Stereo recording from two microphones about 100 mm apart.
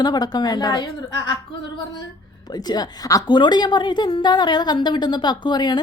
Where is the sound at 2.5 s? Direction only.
40° left (ahead or behind).